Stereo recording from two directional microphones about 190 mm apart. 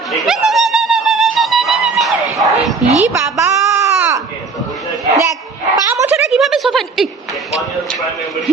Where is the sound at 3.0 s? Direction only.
15° right (ahead or behind).